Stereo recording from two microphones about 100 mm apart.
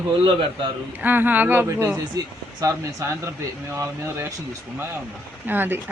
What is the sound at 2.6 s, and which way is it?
Speech, 25° right (ahead or behind).